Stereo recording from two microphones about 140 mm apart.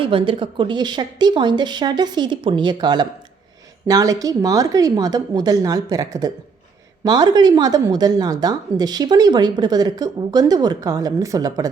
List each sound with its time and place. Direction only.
0.0 s a woman's voice: 40° right (ahead or behind)